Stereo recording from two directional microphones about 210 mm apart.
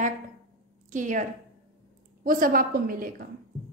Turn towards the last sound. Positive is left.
turn(degrees=-40)  # may be behind; listen again after turning